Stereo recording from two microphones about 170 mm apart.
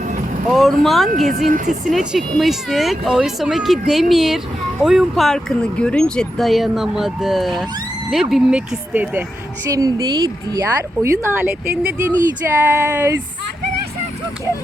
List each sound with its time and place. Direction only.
0.5 s speech: centre (ahead or behind)
1.1 s speech: 50° right (ahead or behind)
1.8 s speech: centre (ahead or behind)
9.6 s speech: 20° right (ahead or behind)